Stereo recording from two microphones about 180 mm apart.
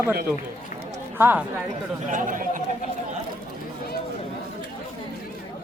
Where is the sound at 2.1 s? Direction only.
45° right (ahead or behind).